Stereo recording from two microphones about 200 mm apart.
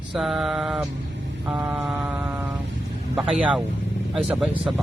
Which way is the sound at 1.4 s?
10° right (ahead or behind).